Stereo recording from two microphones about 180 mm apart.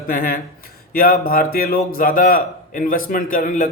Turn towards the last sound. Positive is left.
turn(degrees=45)  # may be behind; listen again after turning